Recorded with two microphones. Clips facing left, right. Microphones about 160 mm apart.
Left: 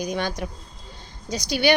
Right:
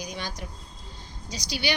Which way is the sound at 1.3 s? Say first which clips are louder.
Left 9 dB; 50° left (ahead or behind).